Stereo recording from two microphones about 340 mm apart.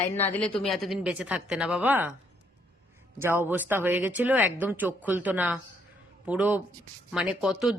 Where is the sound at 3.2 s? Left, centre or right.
Centre.